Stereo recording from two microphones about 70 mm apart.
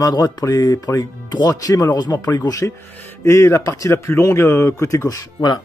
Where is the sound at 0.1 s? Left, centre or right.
Left.